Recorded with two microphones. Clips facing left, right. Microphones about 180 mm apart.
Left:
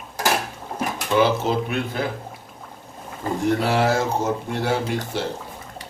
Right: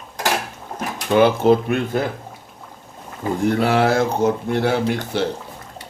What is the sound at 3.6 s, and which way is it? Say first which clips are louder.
Speech: right 3 dB; 60° right (ahead or behind).